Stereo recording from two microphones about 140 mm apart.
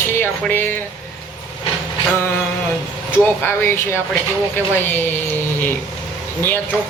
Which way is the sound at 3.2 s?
15° left (ahead or behind).